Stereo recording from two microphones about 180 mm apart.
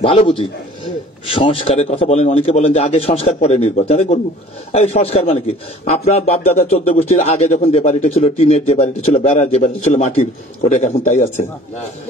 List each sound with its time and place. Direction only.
0.0 s speech: 35° left (ahead or behind)